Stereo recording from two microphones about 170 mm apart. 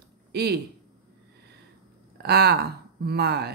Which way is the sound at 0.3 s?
70° right (ahead or behind).